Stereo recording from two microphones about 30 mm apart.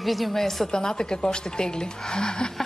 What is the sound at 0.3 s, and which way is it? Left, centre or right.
Speech, centre.